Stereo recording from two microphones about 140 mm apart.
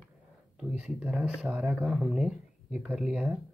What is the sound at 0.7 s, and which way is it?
Speech, 10° right (ahead or behind).